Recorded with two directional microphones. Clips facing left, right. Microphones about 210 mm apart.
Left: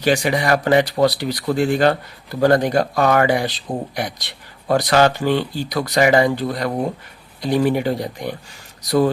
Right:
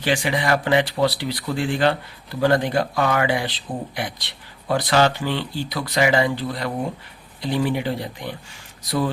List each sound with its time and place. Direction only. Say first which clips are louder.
0.0 s speech: left 4 dB; 40° left (ahead or behind)